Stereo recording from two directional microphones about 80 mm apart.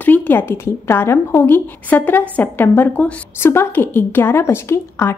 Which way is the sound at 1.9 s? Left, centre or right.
Left.